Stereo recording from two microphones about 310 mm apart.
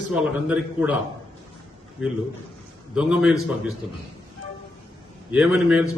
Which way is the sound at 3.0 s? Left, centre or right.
Centre.